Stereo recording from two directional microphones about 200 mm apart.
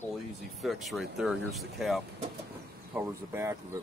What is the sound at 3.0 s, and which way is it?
Speech, 15° right (ahead or behind).